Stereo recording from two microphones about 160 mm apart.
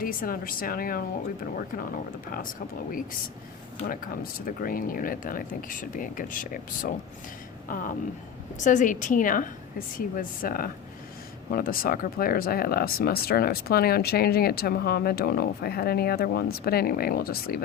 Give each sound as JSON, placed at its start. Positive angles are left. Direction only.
{"t": 0.0, "sound": "speech", "side_deg": 60}
{"t": 3.8, "sound": "a woman's voice", "side_deg": 65}